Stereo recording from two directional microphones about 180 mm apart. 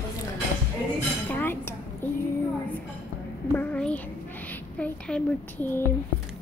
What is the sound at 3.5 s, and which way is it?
Speech, 10° left (ahead or behind).